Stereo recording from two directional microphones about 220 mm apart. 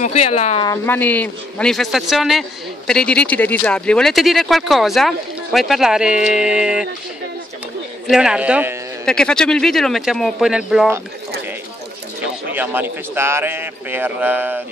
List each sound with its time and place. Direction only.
0.0 s speech: 30° left (ahead or behind)
0.7 s speech: 10° left (ahead or behind)
8.1 s speech: 5° right (ahead or behind)
12.2 s a man's voice: 10° right (ahead or behind)